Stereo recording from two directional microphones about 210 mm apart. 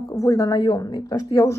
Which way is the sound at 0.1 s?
15° left (ahead or behind).